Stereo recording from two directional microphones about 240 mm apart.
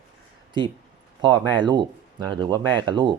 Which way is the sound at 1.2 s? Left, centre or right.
Centre.